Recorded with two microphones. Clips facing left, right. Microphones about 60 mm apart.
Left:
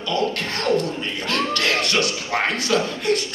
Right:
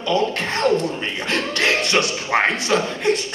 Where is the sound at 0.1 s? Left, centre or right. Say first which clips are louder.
Right 3 dB; right.